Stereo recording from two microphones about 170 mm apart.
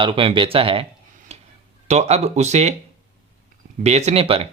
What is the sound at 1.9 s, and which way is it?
Speech, 40° right (ahead or behind).